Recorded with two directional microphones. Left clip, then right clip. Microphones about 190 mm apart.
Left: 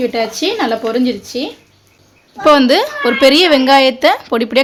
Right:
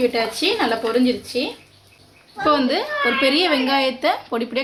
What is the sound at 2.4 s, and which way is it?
A woman's voice, 55° left (ahead or behind).